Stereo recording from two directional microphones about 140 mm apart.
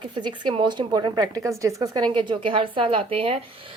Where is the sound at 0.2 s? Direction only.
35° right (ahead or behind).